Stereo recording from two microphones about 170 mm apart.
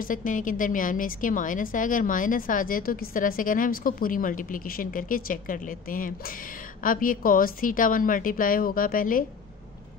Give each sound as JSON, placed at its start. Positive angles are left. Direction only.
{"t": 0.0, "sound": "a woman's voice", "side_deg": 50}